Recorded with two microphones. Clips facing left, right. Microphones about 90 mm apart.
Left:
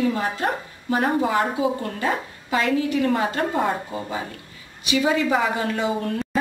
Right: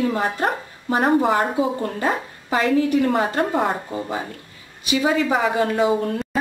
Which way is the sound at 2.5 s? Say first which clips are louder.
Right 3 dB; 35° right (ahead or behind).